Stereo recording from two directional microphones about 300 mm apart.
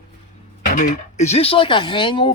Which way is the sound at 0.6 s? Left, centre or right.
Left.